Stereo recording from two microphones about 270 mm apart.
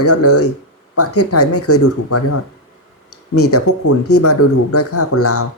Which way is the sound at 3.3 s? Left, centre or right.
Left.